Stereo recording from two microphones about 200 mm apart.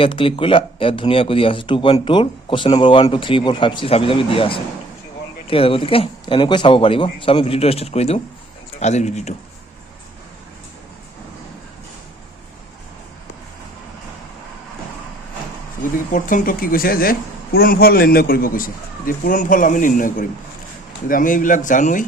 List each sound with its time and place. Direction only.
0.0 s speech: 25° left (ahead or behind)
16.1 s speech: 40° left (ahead or behind)